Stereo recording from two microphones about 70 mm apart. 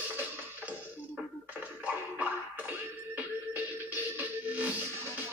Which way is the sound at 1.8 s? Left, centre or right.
Centre.